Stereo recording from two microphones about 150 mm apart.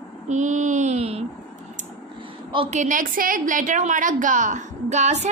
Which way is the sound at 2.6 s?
55° right (ahead or behind).